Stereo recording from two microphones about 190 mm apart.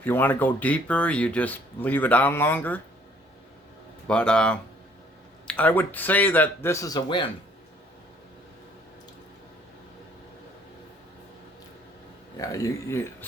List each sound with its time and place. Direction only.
0.0 s speech: 10° left (ahead or behind)
4.0 s speech: 5° left (ahead or behind); by 7.3 s 25° left (ahead or behind)
12.4 s speech: 15° left (ahead or behind)